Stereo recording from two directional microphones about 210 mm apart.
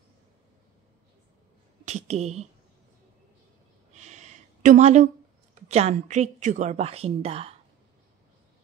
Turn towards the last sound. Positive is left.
turn(degrees=-30)  # may be behind; listen again after turning